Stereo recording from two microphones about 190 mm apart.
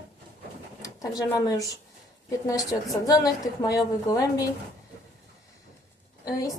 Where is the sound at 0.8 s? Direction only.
15° left (ahead or behind).